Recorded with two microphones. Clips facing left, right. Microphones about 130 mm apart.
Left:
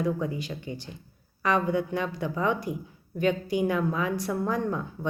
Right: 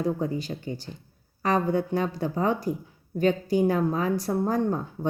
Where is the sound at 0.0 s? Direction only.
35° right (ahead or behind).